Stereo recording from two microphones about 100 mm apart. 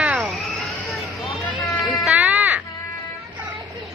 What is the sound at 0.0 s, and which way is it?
Cat, 10° right (ahead or behind).